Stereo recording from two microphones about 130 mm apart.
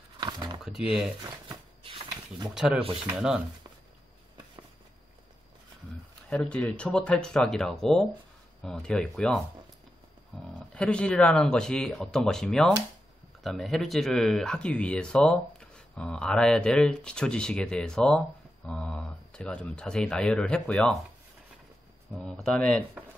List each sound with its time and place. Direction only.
0.2 s a sound: 35° right (ahead or behind)
0.7 s speech: 5° right (ahead or behind)
1.8 s a sound: 45° right (ahead or behind)
2.5 s speech: 5° right (ahead or behind)
6.3 s speech: 10° left (ahead or behind)
10.7 s speech: 10° left (ahead or behind)
22.1 s speech: 5° left (ahead or behind)